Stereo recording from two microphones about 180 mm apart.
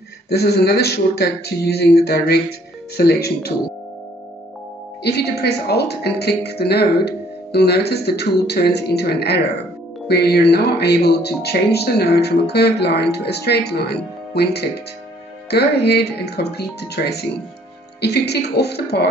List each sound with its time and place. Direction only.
0.3 s speech: 65° left (ahead or behind)
5.0 s speech: 65° left (ahead or behind)